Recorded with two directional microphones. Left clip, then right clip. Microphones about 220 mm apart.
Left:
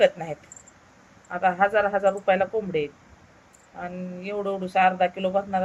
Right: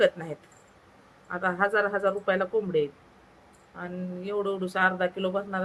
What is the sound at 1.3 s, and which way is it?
Speech, 15° right (ahead or behind).